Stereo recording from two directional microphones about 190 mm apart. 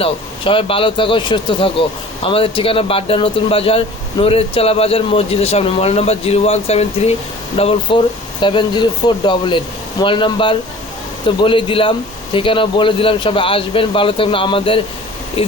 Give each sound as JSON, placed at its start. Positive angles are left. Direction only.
{"t": 0.0, "sound": "speech", "side_deg": 30}